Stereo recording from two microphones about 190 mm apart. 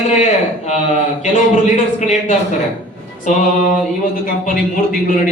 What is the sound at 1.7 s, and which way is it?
Speech, 40° left (ahead or behind).